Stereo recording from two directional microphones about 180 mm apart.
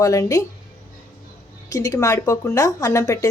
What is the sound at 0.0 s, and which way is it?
Speech, 20° left (ahead or behind).